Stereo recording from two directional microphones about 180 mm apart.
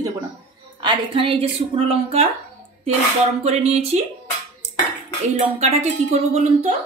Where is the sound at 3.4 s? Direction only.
35° right (ahead or behind).